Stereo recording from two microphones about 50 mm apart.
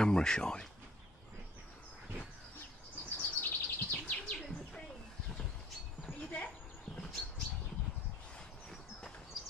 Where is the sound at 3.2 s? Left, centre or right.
Left.